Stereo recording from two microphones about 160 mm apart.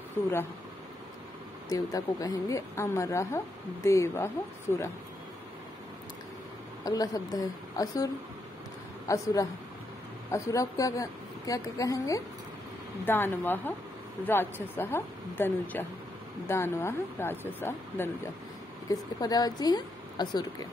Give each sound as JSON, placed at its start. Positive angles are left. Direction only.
{"t": 1.7, "sound": "a woman's voice", "side_deg": 20}
{"t": 6.8, "sound": "a woman's voice", "side_deg": 20}